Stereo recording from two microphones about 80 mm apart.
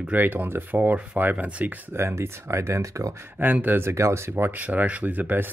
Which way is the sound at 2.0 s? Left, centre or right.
Right.